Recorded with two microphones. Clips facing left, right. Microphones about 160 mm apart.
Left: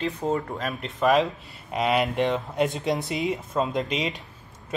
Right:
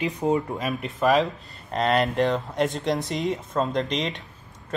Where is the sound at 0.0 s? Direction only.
10° right (ahead or behind).